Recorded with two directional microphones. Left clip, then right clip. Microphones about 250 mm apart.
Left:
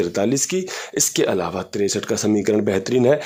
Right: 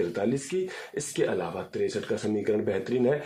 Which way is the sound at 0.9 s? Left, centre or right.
Left.